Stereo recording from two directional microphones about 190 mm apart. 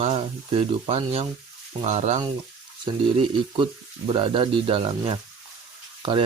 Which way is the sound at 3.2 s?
25° right (ahead or behind).